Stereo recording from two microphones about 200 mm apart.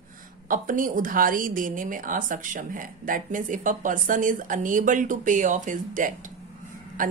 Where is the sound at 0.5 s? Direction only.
45° right (ahead or behind).